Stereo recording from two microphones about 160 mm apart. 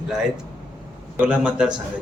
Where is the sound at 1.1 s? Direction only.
5° right (ahead or behind).